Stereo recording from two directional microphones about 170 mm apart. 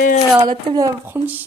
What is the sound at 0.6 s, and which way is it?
Speech, 20° right (ahead or behind).